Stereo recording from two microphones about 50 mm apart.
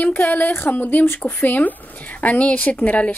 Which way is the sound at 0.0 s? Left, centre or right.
Left.